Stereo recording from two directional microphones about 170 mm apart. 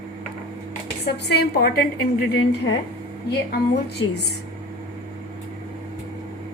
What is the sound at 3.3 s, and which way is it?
Speech, 75° left (ahead or behind).